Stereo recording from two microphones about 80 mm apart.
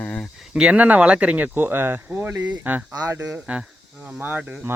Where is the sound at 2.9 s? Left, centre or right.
Right.